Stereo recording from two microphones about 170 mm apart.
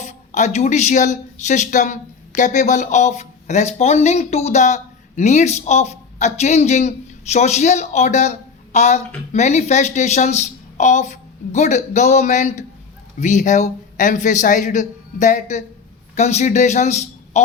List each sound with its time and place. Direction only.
0.0 s a man's voice: 45° left (ahead or behind)